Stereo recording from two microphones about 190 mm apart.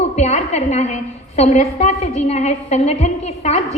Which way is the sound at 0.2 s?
35° left (ahead or behind).